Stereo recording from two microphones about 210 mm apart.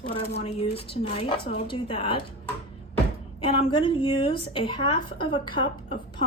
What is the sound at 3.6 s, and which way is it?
A woman's voice, 25° left (ahead or behind).